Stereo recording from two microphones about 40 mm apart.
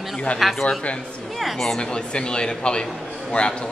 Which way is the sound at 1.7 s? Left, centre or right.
Left.